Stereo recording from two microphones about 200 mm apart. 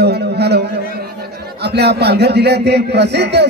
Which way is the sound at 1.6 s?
55° right (ahead or behind).